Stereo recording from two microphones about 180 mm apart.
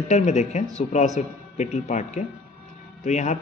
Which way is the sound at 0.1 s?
40° left (ahead or behind).